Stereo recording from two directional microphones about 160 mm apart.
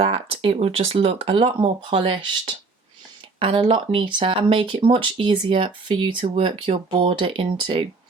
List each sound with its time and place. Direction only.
0.0 s speech: 40° right (ahead or behind)
3.4 s speech: 35° right (ahead or behind)